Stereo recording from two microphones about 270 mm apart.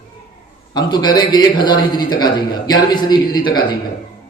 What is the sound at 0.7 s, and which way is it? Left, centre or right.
A man's voice, centre.